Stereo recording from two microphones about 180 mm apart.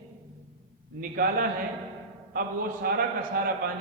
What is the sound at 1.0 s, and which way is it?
A man's voice, 55° right (ahead or behind).